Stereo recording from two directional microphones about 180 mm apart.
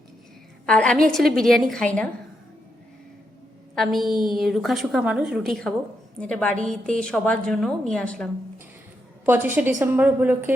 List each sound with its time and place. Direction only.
0.6 s a woman's voice: 5° left (ahead or behind)
3.8 s a woman's voice: centre (ahead or behind)
9.2 s a woman's voice: 10° right (ahead or behind)